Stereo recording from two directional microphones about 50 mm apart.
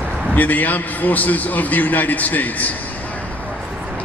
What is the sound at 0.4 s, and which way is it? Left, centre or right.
A man's voice, left.